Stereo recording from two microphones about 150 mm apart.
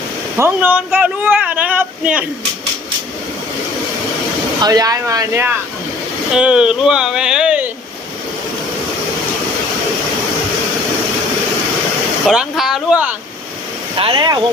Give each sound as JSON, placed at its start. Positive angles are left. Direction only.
{"t": 0.3, "sound": "speech", "side_deg": -15}
{"t": 4.6, "sound": "speech", "side_deg": -25}
{"t": 12.3, "sound": "speech", "side_deg": -5}
{"t": 14.0, "sound": "speech", "side_deg": -30}